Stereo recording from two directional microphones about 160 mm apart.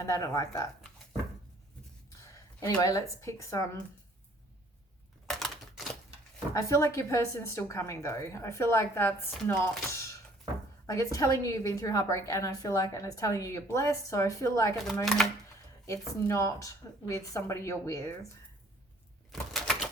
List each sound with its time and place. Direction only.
0.0 s a woman's voice: 20° left (ahead or behind)
2.6 s a woman's voice: 20° left (ahead or behind)
5.2 s a sound: centre (ahead or behind)
6.5 s a woman's voice: 20° left (ahead or behind)
19.3 s typewriter: centre (ahead or behind)